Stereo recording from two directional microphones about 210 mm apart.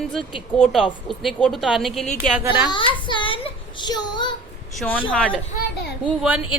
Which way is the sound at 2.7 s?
25° left (ahead or behind).